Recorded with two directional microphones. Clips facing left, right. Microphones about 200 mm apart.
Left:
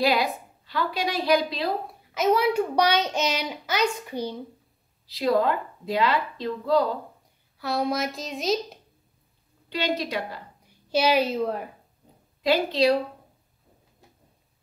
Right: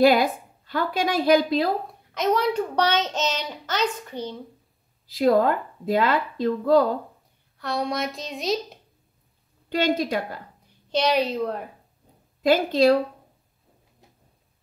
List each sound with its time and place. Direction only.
0.0 s speech: 50° right (ahead or behind)
2.1 s a child's voice: 5° left (ahead or behind)
5.0 s speech: 50° right (ahead or behind)
7.5 s a woman's voice: 5° left (ahead or behind)
9.7 s speech: 50° right (ahead or behind)
10.9 s a woman's voice: 5° left (ahead or behind)
12.4 s speech: 50° right (ahead or behind)